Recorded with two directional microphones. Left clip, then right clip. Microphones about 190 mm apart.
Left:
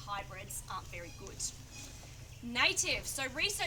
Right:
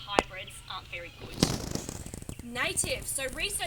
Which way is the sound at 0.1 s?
10° left (ahead or behind).